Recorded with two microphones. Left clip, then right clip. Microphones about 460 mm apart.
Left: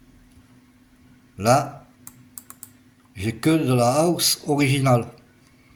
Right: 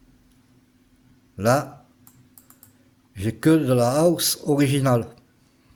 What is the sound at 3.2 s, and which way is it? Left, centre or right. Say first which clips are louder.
Speech: right 2 dB; right.